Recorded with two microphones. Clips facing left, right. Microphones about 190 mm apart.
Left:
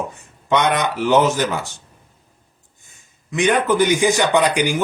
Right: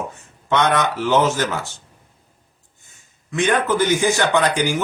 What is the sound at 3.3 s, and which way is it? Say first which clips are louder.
Speech: left 2 dB; 15° left (ahead or behind).